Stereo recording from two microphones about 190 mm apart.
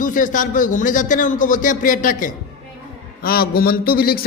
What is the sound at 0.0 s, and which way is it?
A man's voice, 45° left (ahead or behind).